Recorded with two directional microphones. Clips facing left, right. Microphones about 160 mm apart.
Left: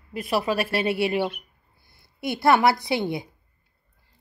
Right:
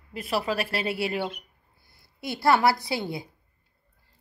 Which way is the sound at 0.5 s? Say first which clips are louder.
Left 4 dB; 25° left (ahead or behind).